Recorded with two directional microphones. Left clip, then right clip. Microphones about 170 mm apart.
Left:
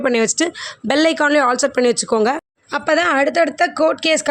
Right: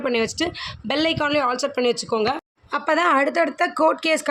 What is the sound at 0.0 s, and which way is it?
A woman's voice, 45° left (ahead or behind).